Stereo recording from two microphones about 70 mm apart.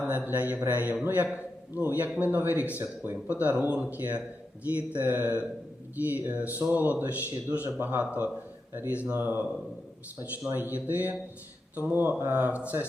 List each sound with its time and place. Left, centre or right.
0.3 s speech: right